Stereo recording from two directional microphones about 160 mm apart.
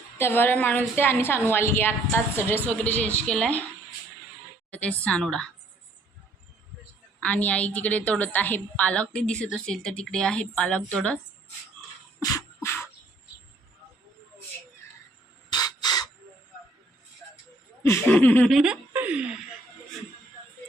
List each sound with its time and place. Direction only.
0.2 s a woman's voice: 15° left (ahead or behind)
4.7 s a woman's voice: 10° left (ahead or behind)
7.2 s a woman's voice: 10° left (ahead or behind)
12.2 s beatboxing: 20° left (ahead or behind)
15.4 s bird: 25° left (ahead or behind)
17.8 s a woman's voice: 15° left (ahead or behind)
18.5 s a woman's voice: 5° right (ahead or behind)